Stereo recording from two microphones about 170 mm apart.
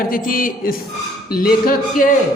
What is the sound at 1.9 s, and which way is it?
Speech, 50° left (ahead or behind).